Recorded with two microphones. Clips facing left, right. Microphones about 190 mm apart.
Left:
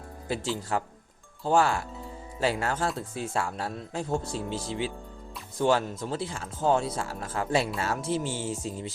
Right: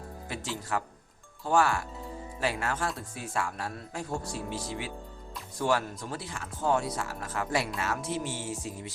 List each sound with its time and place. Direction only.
0.3 s speech: 30° left (ahead or behind)